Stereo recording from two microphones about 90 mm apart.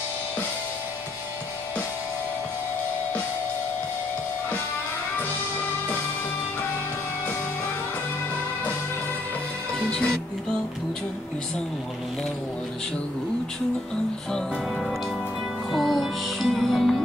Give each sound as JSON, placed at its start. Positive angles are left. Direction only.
{"t": 9.8, "sound": "music", "side_deg": 10}
{"t": 15.7, "sound": "music", "side_deg": 0}